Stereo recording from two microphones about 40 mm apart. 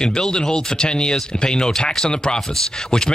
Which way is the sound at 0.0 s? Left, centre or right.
Centre.